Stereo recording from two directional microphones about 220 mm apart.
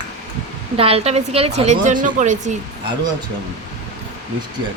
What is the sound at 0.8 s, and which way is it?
A woman's voice, 25° right (ahead or behind).